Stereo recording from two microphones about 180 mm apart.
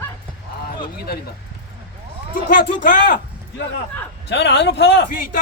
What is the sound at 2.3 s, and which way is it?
Speech, 45° left (ahead or behind).